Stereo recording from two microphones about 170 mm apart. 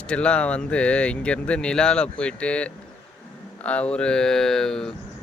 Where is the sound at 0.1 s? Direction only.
5° left (ahead or behind).